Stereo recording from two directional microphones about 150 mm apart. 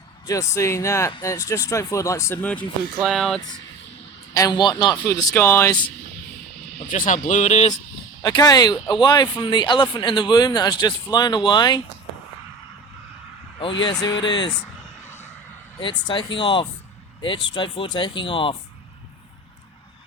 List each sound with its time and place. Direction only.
0.3 s speech: 20° left (ahead or behind); by 3.4 s 5° left (ahead or behind)
4.4 s speech: 25° left (ahead or behind)
6.9 s speech: 55° left (ahead or behind)
8.2 s speech: 25° left (ahead or behind)
13.6 s speech: 35° left (ahead or behind)
15.8 s speech: 30° left (ahead or behind)